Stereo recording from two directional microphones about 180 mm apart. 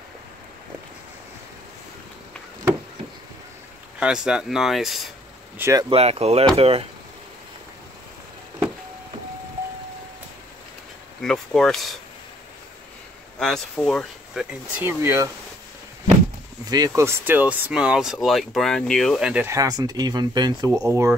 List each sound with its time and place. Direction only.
4.0 s speech: 5° right (ahead or behind)
5.6 s speech: 15° right (ahead or behind)
5.9 s speech: 35° right (ahead or behind)
11.1 s speech: centre (ahead or behind)
13.4 s speech: 5° left (ahead or behind); by 15.2 s 15° right (ahead or behind)
16.6 s speech: 20° right (ahead or behind); by 19.4 s centre (ahead or behind)
19.4 s speech: 20° right (ahead or behind)